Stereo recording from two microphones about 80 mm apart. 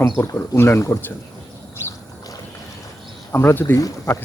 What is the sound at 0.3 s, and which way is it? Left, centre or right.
Speech, left.